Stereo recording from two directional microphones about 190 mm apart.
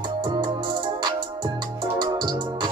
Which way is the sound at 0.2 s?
25° right (ahead or behind).